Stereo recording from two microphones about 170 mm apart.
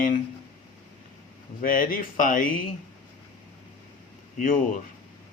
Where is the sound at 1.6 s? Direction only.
55° left (ahead or behind).